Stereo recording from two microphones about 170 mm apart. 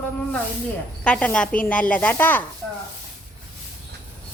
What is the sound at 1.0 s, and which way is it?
Speech, 10° left (ahead or behind).